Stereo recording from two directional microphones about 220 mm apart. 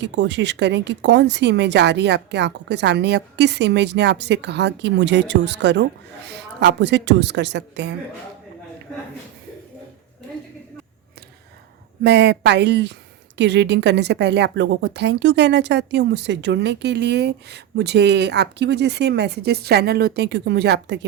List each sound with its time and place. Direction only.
0.0 s a woman's voice: 50° right (ahead or behind)
12.0 s a woman's voice: 50° right (ahead or behind)